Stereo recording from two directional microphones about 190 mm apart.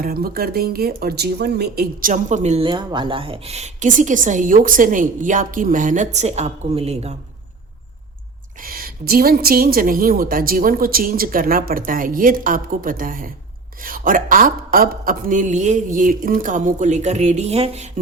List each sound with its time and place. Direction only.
0.0 s speech: 50° right (ahead or behind); by 7.2 s 35° right (ahead or behind)
8.6 s speech: 50° right (ahead or behind); by 17.8 s 35° right (ahead or behind)